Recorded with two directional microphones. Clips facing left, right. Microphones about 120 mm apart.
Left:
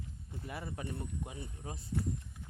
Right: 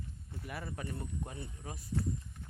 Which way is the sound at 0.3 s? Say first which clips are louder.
Even; 20° left (ahead or behind).